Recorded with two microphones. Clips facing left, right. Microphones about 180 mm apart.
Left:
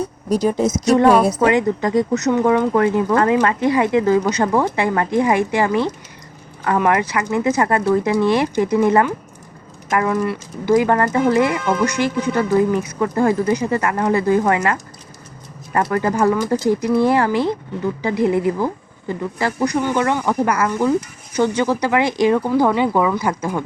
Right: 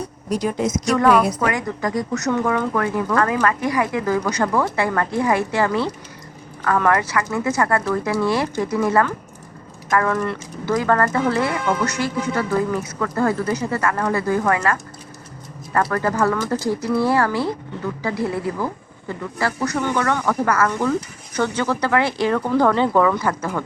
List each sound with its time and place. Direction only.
0.4 s a woman's voice: 40° left (ahead or behind); by 23.6 s 15° left (ahead or behind)